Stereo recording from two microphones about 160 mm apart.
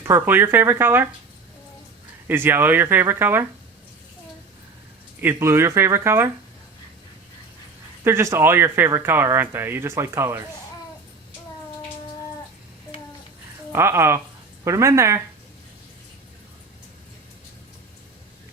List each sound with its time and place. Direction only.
0.0 s speech: 15° right (ahead or behind)
2.2 s speech: 15° right (ahead or behind)
5.2 s speech: 15° right (ahead or behind)
8.0 s speech: 15° right (ahead or behind)
13.7 s speech: 15° right (ahead or behind)